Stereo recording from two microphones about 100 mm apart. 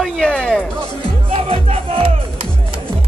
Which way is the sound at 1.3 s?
65° right (ahead or behind).